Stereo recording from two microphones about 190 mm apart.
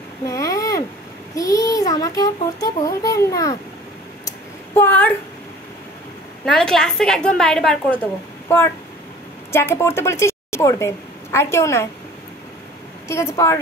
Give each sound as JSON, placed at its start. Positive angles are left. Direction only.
{"t": 0.3, "sound": "a sound", "side_deg": 15}
{"t": 1.3, "sound": "a child's voice", "side_deg": 20}
{"t": 4.7, "sound": "a child's voice", "side_deg": 10}
{"t": 6.4, "sound": "a woman's voice", "side_deg": 5}
{"t": 13.1, "sound": "a child's voice", "side_deg": 15}